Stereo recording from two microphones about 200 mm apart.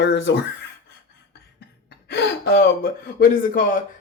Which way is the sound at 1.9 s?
55° left (ahead or behind).